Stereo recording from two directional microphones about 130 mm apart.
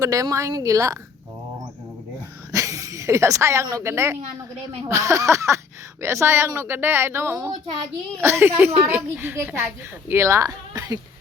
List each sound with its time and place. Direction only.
0.0 s speech: 25° right (ahead or behind)
2.5 s a sound: 25° right (ahead or behind)
3.7 s a woman's voice: 25° right (ahead or behind)